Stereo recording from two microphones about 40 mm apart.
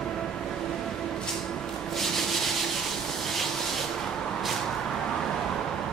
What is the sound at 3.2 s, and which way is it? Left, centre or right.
Rub, centre.